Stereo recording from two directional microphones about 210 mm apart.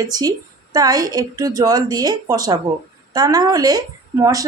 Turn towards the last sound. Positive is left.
turn(degrees=-15)  # may be behind; listen again after turning